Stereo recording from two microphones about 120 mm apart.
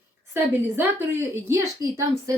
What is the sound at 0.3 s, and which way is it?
A woman's voice, 20° right (ahead or behind).